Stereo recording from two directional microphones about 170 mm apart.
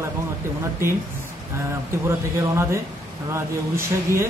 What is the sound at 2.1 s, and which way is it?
Speech, 15° right (ahead or behind).